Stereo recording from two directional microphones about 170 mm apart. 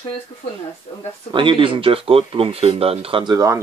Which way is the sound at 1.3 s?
30° right (ahead or behind).